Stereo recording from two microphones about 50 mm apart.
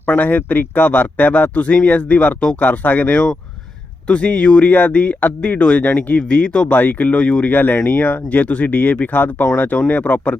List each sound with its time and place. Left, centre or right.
0.0 s a man's voice: left
6.1 s speech: left
6.7 s speech: left
7.9 s a man's voice: left